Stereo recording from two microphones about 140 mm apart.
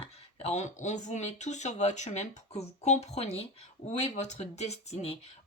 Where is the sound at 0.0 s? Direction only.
50° left (ahead or behind).